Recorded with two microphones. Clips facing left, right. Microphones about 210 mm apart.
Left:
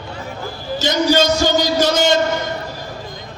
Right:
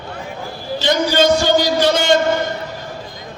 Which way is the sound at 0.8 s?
45° left (ahead or behind).